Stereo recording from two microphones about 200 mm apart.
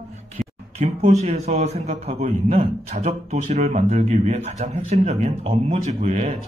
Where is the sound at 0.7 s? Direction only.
35° right (ahead or behind).